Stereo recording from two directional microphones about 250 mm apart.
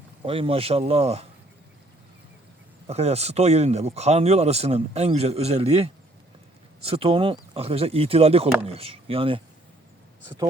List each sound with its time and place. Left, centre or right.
0.3 s speech: right
2.8 s speech: right